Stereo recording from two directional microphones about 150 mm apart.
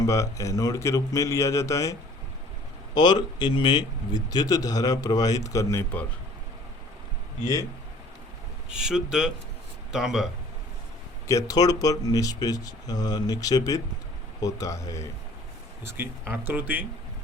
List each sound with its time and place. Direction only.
0.0 s speech: 20° left (ahead or behind)
7.4 s speech: 20° left (ahead or behind)
8.7 s speech: 5° right (ahead or behind)
11.3 s speech: 25° left (ahead or behind)
15.8 s speech: 15° right (ahead or behind)